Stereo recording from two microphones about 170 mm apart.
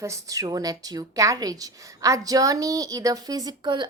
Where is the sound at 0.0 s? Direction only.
20° right (ahead or behind).